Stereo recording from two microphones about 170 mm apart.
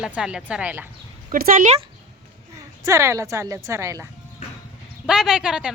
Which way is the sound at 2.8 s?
20° right (ahead or behind).